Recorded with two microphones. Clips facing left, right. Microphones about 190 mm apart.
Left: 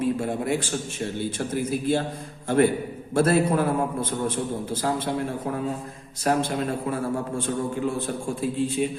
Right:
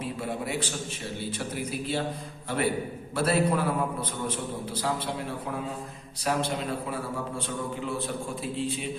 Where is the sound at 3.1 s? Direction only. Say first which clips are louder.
Left 5 dB; 45° left (ahead or behind).